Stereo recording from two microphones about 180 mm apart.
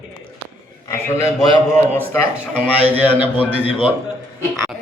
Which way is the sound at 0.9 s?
15° left (ahead or behind).